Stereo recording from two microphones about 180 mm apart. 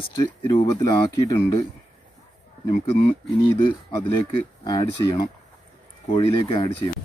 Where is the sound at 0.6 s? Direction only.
20° left (ahead or behind).